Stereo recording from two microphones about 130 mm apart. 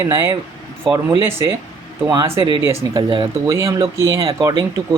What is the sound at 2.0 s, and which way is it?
Speech, 30° right (ahead or behind).